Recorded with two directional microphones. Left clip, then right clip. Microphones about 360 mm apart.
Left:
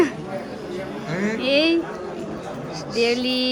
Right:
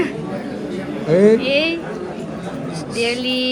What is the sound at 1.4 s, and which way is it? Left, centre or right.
Speech, left.